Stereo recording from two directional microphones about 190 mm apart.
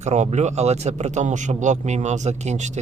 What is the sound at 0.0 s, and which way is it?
Speech, 35° right (ahead or behind).